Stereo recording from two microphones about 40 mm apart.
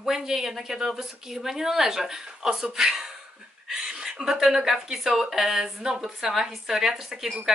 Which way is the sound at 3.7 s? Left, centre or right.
Right.